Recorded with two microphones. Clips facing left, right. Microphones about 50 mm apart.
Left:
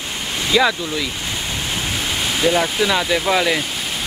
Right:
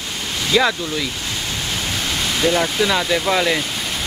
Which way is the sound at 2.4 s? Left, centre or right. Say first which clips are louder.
Even; centre.